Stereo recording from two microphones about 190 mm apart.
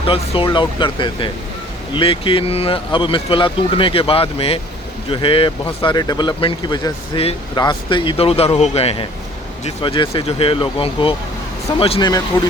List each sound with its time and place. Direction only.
0.0 s speech: 30° left (ahead or behind)